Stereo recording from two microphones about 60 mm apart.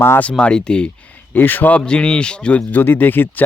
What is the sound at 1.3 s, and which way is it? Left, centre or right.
Speech, left.